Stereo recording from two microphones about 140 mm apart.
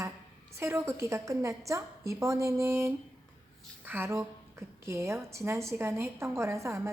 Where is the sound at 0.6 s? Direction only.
20° right (ahead or behind).